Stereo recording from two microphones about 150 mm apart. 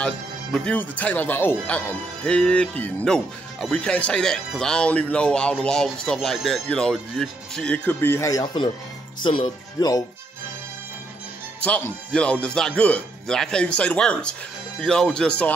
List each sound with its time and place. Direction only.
0.0 s speech: 5° left (ahead or behind); by 10.0 s 25° left (ahead or behind)
11.6 s speech: 10° left (ahead or behind)